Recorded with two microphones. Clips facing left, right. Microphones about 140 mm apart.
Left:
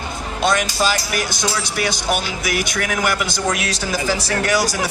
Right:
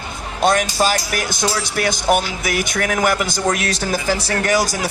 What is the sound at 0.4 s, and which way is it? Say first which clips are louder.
Speech: right 2 dB; 50° right (ahead or behind).